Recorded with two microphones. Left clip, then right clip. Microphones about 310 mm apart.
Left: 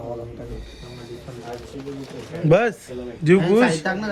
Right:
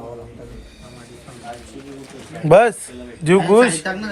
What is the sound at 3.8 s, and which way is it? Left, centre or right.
Speech, left.